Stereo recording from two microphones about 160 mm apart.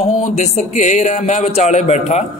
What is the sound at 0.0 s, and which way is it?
A man's voice, 45° left (ahead or behind).